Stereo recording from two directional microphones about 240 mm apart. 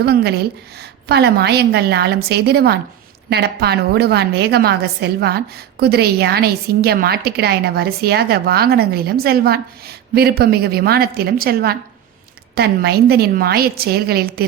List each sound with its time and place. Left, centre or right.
0.0 s a woman's voice: right